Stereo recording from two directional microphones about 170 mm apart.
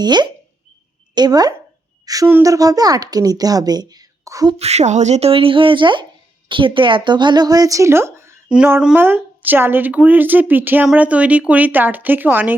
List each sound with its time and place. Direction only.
0.0 s speech: 25° right (ahead or behind)
4.5 s speech: 40° right (ahead or behind); by 12.5 s 10° right (ahead or behind)